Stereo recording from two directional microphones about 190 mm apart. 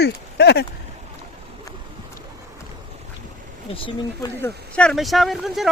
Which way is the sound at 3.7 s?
30° left (ahead or behind).